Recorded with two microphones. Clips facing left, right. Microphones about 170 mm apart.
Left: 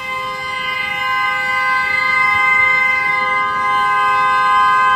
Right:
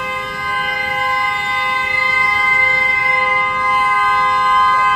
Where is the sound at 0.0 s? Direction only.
65° right (ahead or behind).